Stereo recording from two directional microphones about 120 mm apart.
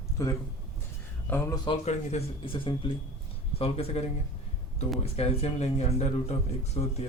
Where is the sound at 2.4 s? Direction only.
45° left (ahead or behind).